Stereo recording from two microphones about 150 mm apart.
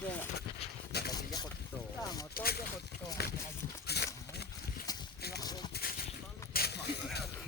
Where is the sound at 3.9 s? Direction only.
90° left.